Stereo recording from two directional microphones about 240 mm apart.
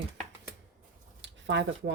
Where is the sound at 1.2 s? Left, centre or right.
Right.